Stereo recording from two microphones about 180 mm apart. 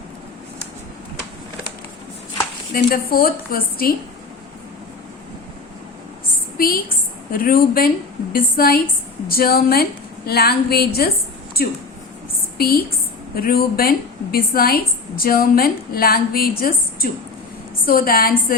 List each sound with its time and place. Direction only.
2.7 s a woman's voice: 55° left (ahead or behind)
7.3 s a woman's voice: 55° left (ahead or behind)